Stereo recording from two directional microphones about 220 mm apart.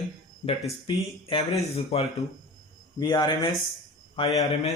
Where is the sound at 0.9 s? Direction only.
25° left (ahead or behind).